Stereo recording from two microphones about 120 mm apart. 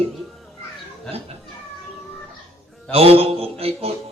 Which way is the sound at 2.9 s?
55° right (ahead or behind).